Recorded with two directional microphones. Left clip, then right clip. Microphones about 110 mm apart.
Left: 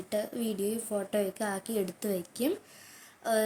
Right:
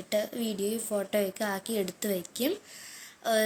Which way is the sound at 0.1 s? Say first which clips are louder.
Right 3 dB; 5° left (ahead or behind).